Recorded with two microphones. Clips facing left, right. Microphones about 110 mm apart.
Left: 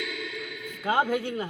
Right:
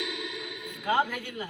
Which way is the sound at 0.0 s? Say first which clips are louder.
Left 1 dB; 20° right (ahead or behind).